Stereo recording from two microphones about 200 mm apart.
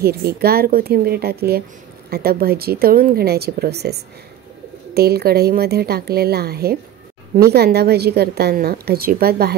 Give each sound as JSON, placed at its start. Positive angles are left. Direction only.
{"t": 0.0, "sound": "a woman's voice", "side_deg": -50}